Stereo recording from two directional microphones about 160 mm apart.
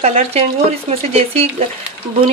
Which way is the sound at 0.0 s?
40° right (ahead or behind).